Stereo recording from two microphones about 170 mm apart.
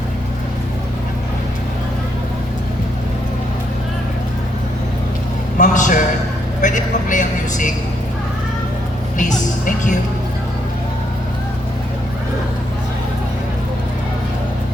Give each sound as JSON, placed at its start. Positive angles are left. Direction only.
{"t": 5.5, "sound": "a sound", "side_deg": 50}
{"t": 6.6, "sound": "vehicle", "side_deg": 50}
{"t": 9.6, "sound": "music", "side_deg": 50}